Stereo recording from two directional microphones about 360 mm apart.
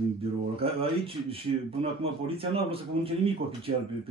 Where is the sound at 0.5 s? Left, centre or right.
Centre.